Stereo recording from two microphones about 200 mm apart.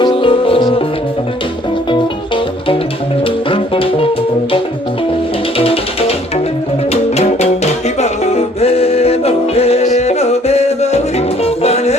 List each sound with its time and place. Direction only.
0.0 s music: 25° left (ahead or behind)
1.9 s music: 25° left (ahead or behind)
5.5 s music: 30° left (ahead or behind)